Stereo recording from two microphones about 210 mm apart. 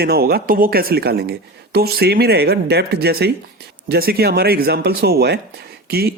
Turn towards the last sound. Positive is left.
turn(degrees=-45)  # may be behind; listen again after turning